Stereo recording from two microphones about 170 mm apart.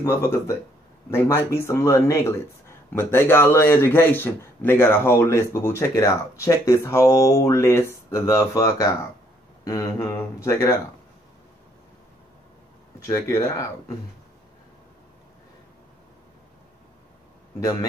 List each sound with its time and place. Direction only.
0.0 s a man's voice: 15° left (ahead or behind)
13.0 s speech: 20° left (ahead or behind)